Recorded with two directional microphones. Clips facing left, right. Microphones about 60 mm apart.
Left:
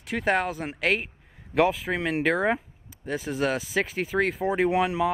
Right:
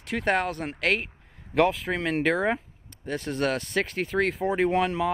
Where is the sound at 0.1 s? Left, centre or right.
Centre.